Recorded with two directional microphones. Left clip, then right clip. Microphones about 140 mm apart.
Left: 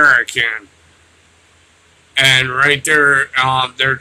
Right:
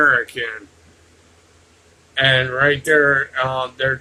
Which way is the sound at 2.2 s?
25° left (ahead or behind).